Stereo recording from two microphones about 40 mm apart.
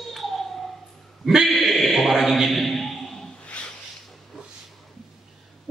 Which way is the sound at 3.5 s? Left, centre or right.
Left.